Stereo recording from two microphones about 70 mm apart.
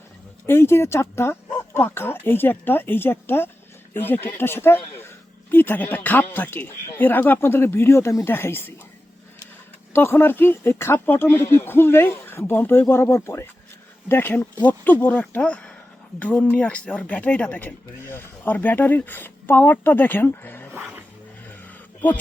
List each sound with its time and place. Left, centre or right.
0.4 s speech: left
9.9 s speech: left
18.1 s speech: left
18.5 s speech: left